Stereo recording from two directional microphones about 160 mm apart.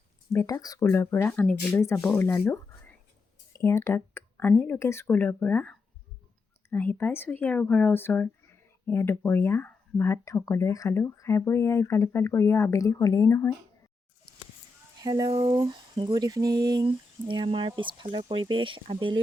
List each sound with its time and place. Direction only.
0.3 s speech: 20° left (ahead or behind)
15.0 s speech: 25° right (ahead or behind)